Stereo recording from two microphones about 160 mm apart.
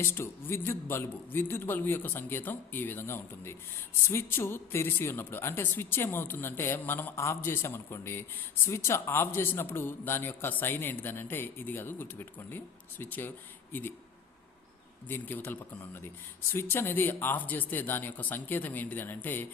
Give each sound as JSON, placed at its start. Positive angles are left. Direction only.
{"t": 0.0, "sound": "a man's voice", "side_deg": 15}
{"t": 15.0, "sound": "a man's voice", "side_deg": 10}